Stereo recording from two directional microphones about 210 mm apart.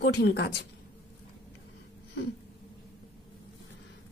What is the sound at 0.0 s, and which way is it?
Speech, 50° left (ahead or behind).